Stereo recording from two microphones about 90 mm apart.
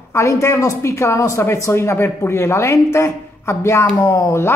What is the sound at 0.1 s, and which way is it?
Speech, 35° left (ahead or behind).